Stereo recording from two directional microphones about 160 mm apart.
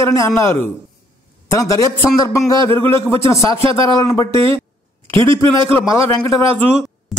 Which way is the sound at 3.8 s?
20° left (ahead or behind).